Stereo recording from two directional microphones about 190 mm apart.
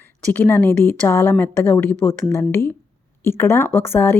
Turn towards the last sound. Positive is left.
turn(degrees=10)  # may be behind; listen again after turning